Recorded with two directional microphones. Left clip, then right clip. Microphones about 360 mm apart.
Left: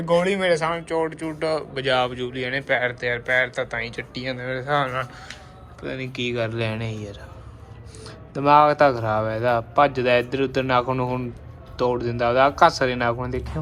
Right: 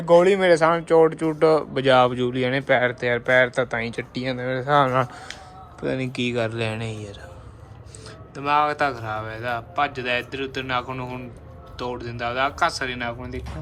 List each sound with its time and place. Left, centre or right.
0.0 s speech: centre
8.4 s a man's voice: centre